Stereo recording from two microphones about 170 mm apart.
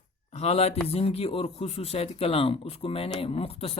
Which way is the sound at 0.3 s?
40° left (ahead or behind).